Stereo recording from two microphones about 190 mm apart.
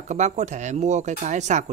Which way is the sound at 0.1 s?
40° right (ahead or behind).